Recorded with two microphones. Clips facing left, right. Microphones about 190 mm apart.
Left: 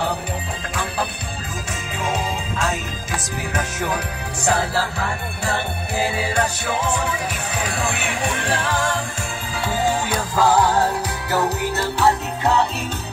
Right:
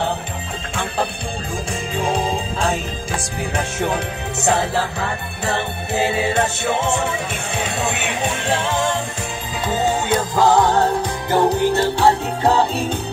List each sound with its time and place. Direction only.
2.0 s music: 30° right (ahead or behind)